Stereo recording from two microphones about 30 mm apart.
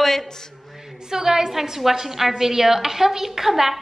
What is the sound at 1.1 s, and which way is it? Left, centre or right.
Speech, right.